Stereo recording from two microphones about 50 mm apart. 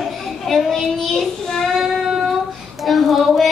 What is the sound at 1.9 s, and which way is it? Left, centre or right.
Child singing, centre.